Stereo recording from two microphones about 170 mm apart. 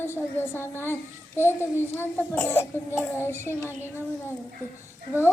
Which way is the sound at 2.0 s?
10° left (ahead or behind).